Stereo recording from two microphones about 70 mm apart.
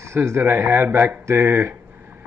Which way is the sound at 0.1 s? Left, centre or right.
Right.